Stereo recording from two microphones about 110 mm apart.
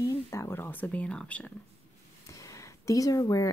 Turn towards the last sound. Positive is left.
turn(degrees=30)  # may be behind; listen again after turning